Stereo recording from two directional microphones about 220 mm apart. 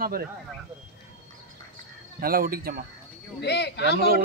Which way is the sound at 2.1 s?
40° right (ahead or behind).